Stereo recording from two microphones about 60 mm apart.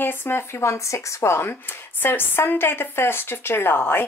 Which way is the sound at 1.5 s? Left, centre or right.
Left.